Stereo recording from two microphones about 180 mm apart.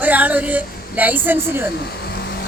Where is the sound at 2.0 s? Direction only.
65° left (ahead or behind).